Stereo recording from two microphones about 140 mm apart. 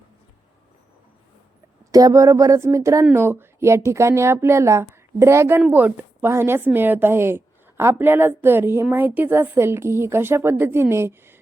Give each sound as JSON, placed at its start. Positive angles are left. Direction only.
{"t": 1.9, "sound": "a woman's voice", "side_deg": -25}